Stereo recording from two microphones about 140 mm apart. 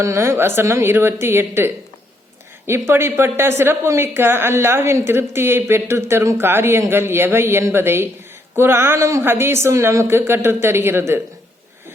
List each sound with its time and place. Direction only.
0.0 s a woman's voice: 20° right (ahead or behind)